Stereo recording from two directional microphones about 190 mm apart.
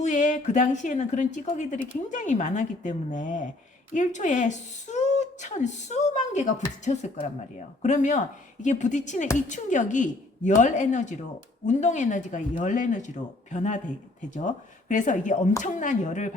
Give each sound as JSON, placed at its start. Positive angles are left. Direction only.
{"t": 0.0, "sound": "speech", "side_deg": 40}